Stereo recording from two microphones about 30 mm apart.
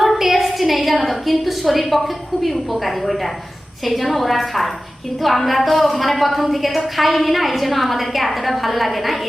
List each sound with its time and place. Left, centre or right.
0.0 s a woman's voice: centre